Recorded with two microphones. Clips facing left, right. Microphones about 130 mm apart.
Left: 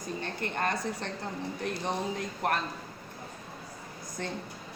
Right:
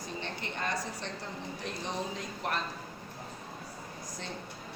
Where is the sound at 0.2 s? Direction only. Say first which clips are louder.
Left 5 dB; 50° left (ahead or behind).